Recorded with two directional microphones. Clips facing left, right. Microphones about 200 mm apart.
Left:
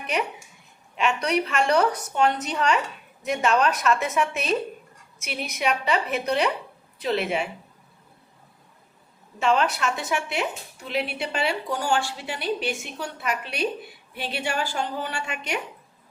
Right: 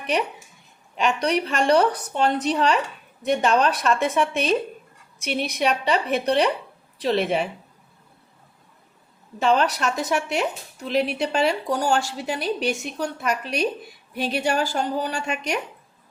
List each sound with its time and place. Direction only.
0.9 s a woman's voice: 35° right (ahead or behind)
9.4 s a woman's voice: 35° right (ahead or behind)